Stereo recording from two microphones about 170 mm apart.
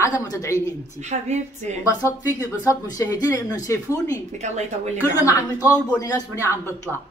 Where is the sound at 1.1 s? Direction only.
50° right (ahead or behind).